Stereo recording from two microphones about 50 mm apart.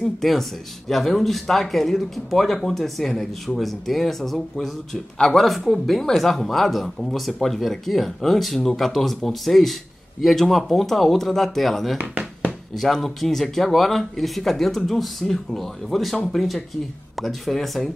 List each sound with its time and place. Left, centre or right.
0.0 s speech: centre
12.0 s a sound: right
12.7 s speech: centre